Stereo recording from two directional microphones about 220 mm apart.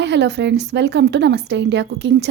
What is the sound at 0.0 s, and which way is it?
Speech, 50° right (ahead or behind).